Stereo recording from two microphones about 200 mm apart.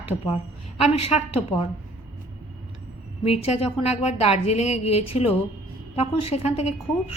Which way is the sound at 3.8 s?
30° left (ahead or behind).